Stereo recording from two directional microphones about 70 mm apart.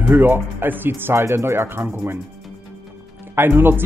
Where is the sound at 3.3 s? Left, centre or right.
Right.